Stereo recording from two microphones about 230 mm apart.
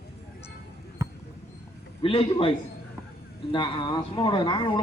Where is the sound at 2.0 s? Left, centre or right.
Left.